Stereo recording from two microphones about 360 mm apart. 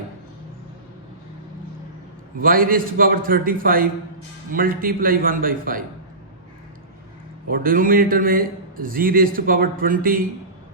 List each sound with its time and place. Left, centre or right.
2.4 s a man's voice: right
7.4 s a man's voice: right